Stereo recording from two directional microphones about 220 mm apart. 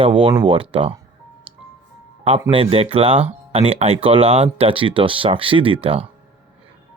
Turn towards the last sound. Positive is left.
turn(degrees=-25)  # may be behind; listen again after turning